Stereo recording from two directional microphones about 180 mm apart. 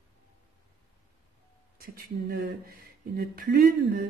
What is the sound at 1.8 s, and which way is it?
Speech, 55° right (ahead or behind).